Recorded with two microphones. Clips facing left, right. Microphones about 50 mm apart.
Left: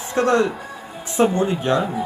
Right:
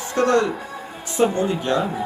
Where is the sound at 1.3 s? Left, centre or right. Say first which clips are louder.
Left 2 dB; left.